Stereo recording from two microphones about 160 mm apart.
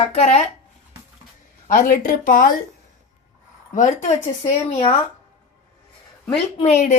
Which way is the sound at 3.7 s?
50° left (ahead or behind).